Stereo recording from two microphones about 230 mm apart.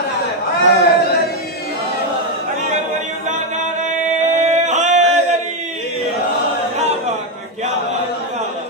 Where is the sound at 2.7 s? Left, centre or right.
Right.